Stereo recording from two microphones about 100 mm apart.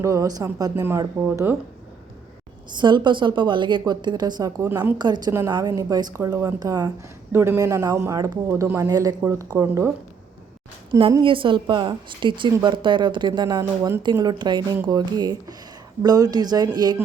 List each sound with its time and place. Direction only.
0.0 s speech: 35° right (ahead or behind)
2.7 s a woman's voice: 50° right (ahead or behind); by 4.9 s 25° right (ahead or behind)
4.9 s a woman's voice: 45° right (ahead or behind)
7.3 s a man's voice: 25° right (ahead or behind)
8.9 s speech: 35° right (ahead or behind)
11.2 s a woman's voice: 60° right (ahead or behind); by 17.0 s 45° right (ahead or behind)